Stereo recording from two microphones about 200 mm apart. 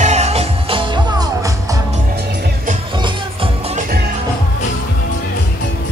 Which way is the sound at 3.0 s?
25° right (ahead or behind).